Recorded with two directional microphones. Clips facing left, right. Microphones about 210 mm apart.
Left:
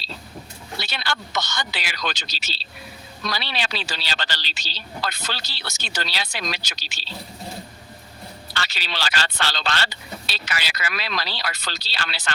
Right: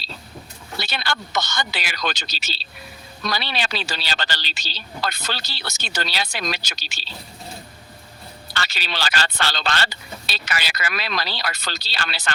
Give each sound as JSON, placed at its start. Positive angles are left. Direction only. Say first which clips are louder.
{"t": 0.8, "sound": "speech", "louder": "right 2 dB", "side_deg": -50}
{"t": 8.5, "sound": "speech", "louder": "right 2 dB", "side_deg": -50}